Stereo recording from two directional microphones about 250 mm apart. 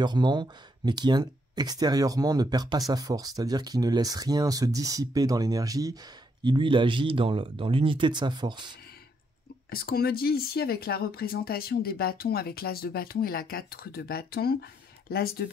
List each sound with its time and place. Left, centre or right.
0.0 s speech: centre
9.7 s speech: left